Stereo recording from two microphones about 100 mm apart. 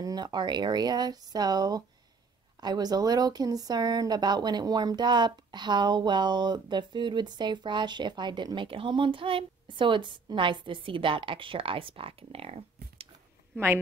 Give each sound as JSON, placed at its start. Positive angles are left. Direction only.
{"t": 0.0, "sound": "speech", "side_deg": -45}